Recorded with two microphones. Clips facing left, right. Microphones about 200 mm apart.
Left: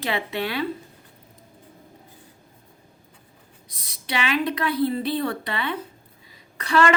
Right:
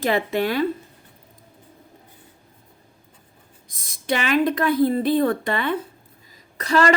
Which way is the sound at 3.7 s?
45° right (ahead or behind).